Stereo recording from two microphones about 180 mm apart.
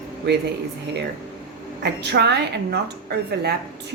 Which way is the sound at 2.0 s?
70° right (ahead or behind).